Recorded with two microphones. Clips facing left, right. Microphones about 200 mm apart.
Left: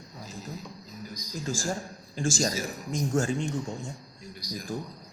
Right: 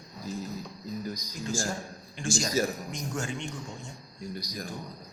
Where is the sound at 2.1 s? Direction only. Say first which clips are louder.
Even; 35° left (ahead or behind).